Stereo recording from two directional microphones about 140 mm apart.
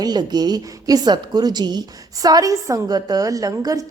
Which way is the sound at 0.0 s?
30° right (ahead or behind).